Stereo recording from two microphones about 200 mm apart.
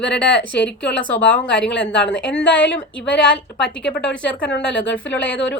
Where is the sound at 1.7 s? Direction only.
5° left (ahead or behind).